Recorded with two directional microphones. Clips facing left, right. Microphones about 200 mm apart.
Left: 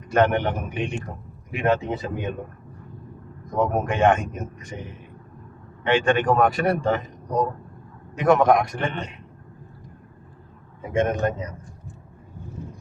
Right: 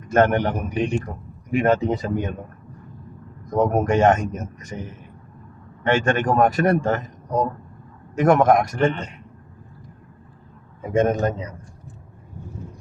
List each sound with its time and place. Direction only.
0.1 s a man's voice: 45° right (ahead or behind)
3.4 s a man's voice: 45° right (ahead or behind)
8.1 s a man's voice: 45° right (ahead or behind)
10.8 s a man's voice: 40° right (ahead or behind)